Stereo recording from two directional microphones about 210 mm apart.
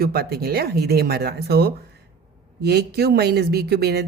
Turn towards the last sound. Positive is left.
turn(degrees=-50)  # may be behind; listen again after turning